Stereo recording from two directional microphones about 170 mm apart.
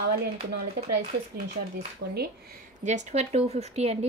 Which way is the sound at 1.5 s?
65° right (ahead or behind).